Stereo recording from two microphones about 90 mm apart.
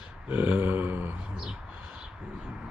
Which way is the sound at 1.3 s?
5° right (ahead or behind).